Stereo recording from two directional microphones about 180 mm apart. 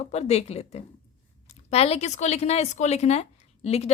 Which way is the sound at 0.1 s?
35° left (ahead or behind).